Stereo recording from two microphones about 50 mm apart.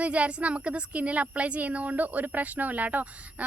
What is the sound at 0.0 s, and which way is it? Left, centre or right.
A woman's voice, right.